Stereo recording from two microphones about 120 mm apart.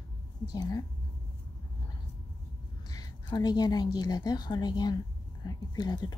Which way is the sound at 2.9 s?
30° left (ahead or behind).